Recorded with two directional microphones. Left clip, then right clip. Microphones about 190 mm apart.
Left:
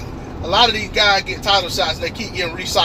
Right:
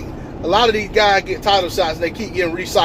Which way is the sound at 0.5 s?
30° right (ahead or behind).